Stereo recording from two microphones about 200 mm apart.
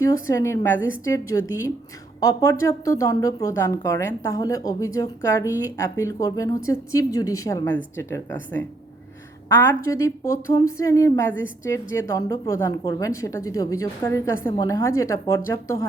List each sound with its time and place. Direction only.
0.0 s a woman's voice: 15° left (ahead or behind)
9.5 s a woman's voice: 10° left (ahead or behind)